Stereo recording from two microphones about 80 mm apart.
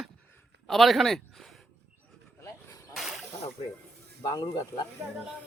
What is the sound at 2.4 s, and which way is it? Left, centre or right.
Vehicle, left.